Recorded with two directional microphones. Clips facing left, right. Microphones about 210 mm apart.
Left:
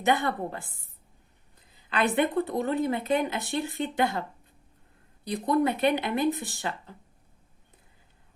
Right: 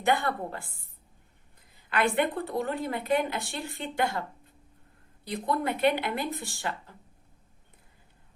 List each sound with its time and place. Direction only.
0.0 s speech: 20° left (ahead or behind)
1.9 s speech: 20° left (ahead or behind)
5.5 s speech: 20° left (ahead or behind)